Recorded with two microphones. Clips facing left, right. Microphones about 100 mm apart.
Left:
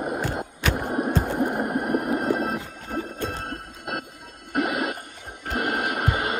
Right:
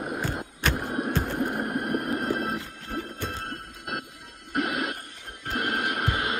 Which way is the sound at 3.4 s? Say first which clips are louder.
Left 3 dB; 5° left (ahead or behind).